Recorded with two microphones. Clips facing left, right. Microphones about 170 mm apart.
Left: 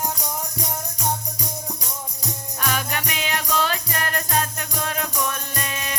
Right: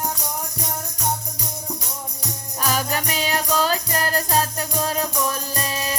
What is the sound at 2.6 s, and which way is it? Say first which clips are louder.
Music: right 3 dB; 35° right (ahead or behind).